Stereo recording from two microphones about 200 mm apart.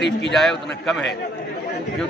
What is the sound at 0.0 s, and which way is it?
Speech, 60° left (ahead or behind).